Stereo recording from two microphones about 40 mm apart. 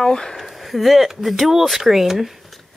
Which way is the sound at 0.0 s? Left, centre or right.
Centre.